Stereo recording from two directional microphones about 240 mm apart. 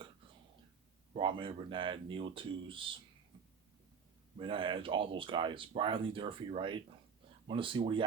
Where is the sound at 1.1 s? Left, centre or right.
Right.